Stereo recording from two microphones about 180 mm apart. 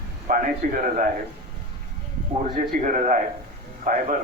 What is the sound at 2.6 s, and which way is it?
A man's voice, 50° right (ahead or behind).